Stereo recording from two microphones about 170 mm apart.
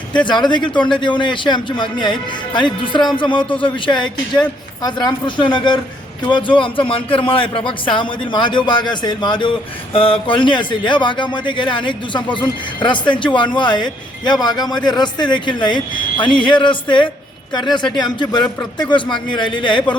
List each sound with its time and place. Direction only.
0.3 s speech: 30° left (ahead or behind)